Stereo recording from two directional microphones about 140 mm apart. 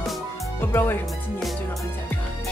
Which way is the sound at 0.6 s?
15° left (ahead or behind).